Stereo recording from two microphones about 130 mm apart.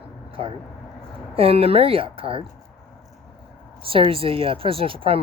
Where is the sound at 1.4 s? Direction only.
50° right (ahead or behind).